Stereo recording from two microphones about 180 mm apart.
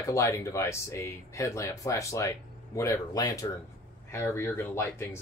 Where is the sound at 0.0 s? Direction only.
15° left (ahead or behind).